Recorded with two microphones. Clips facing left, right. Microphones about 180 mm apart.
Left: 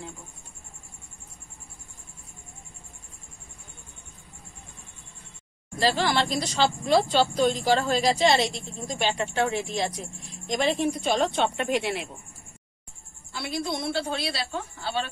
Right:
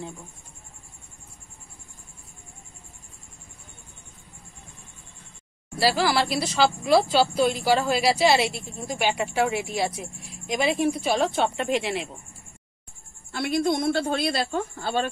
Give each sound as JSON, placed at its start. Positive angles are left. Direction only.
{"t": 5.8, "sound": "speech", "side_deg": -5}
{"t": 13.3, "sound": "a woman's voice", "side_deg": -50}